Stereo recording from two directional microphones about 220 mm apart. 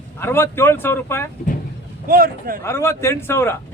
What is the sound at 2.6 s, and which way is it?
Speech, 10° left (ahead or behind).